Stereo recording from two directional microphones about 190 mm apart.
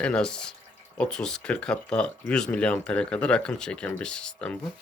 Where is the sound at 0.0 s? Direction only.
5° left (ahead or behind).